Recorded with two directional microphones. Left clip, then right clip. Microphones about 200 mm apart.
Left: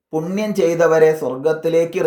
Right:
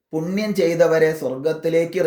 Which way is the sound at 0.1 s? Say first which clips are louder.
Left 3 dB; 5° left (ahead or behind).